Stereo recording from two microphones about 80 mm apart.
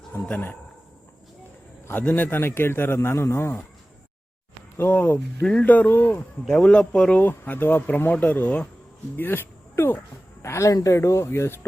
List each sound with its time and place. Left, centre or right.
0.3 s a man's voice: left
1.9 s a man's voice: left
4.8 s a man's voice: left
6.5 s speech: centre
7.2 s a man's voice: left
10.4 s speech: left